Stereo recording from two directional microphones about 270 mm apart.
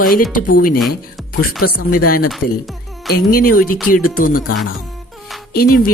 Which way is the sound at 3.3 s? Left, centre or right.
Left.